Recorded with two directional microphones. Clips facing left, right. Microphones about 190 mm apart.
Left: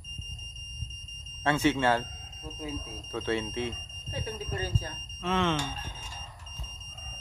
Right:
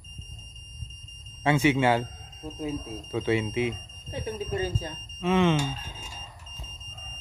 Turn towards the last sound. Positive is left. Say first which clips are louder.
# right 5 dB
turn(degrees=-10)  # may be behind; listen again after turning